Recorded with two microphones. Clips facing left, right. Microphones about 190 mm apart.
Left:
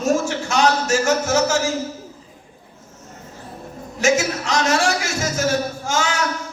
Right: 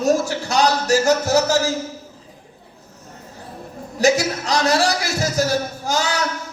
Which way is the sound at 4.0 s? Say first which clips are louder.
Right 1 dB; 35° right (ahead or behind).